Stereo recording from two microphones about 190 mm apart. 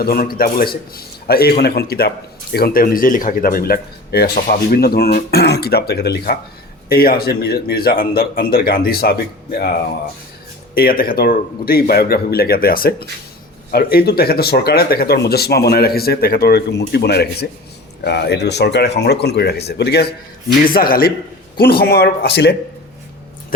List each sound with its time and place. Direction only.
0.0 s a man's voice: 50° left (ahead or behind)
10.8 s a man's voice: 50° left (ahead or behind)
20.7 s a man's voice: 50° left (ahead or behind)